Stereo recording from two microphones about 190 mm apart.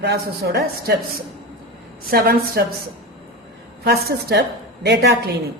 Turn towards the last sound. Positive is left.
turn(degrees=-60)  # may be behind; listen again after turning